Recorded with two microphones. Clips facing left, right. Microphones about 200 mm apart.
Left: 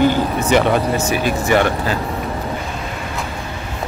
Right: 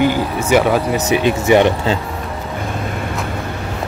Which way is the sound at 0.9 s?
20° right (ahead or behind).